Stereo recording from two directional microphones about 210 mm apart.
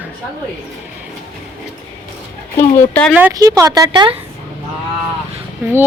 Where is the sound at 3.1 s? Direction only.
10° right (ahead or behind).